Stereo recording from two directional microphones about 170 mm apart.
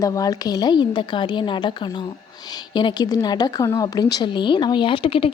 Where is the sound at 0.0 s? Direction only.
20° left (ahead or behind).